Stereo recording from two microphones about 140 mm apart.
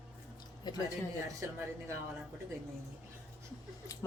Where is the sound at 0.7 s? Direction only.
30° left (ahead or behind).